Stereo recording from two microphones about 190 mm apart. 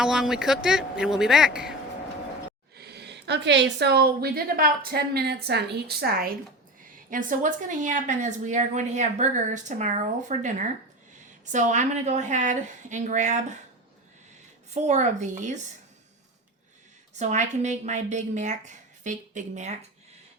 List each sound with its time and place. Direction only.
0.0 s speech: 5° right (ahead or behind)
2.7 s a woman's voice: 60° right (ahead or behind); by 13.6 s 40° right (ahead or behind)
14.7 s a woman's voice: 35° right (ahead or behind)
17.2 s a woman's voice: 40° right (ahead or behind)